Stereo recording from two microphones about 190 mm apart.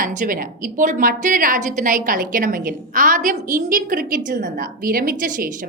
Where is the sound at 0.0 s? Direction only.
45° right (ahead or behind).